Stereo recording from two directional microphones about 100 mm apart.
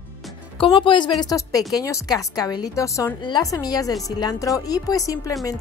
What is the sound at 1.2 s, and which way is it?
A woman's voice, 35° left (ahead or behind).